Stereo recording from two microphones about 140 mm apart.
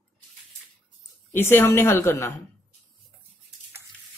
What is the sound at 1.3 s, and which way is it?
A woman's voice, 15° left (ahead or behind).